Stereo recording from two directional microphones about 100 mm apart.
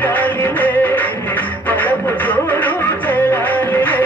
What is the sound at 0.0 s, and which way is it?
Music, 20° left (ahead or behind).